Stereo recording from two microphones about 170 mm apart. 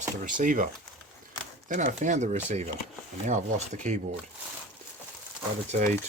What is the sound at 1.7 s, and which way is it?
Speech, 45° right (ahead or behind).